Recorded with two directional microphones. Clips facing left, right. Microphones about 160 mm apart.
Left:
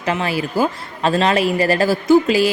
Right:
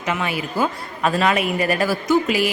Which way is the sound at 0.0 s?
30° left (ahead or behind).